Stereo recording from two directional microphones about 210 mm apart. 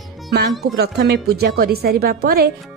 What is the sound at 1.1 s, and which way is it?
Speech, 50° right (ahead or behind).